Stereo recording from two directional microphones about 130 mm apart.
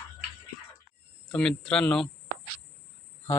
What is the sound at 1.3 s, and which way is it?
Speech, 5° left (ahead or behind).